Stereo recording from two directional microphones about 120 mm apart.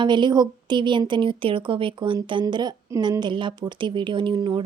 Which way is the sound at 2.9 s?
25° right (ahead or behind).